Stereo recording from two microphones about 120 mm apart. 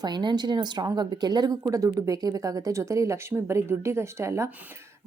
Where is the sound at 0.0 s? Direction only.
40° right (ahead or behind).